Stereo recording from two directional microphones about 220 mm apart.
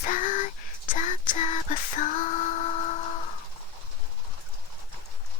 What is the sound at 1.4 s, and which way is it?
Female singing, 35° left (ahead or behind).